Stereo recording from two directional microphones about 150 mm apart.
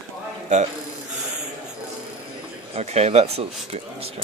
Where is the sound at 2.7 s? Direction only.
45° right (ahead or behind).